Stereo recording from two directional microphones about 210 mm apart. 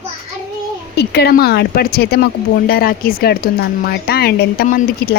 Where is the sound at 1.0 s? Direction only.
50° left (ahead or behind).